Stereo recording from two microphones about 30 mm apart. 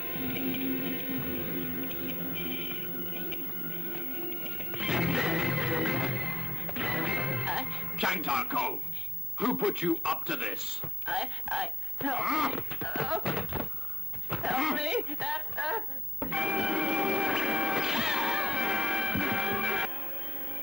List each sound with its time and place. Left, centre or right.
0.0 s music: centre
7.9 s a man's voice: centre
14.3 s a sound: centre